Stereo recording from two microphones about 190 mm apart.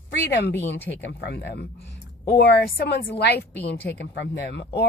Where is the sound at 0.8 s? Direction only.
10° left (ahead or behind).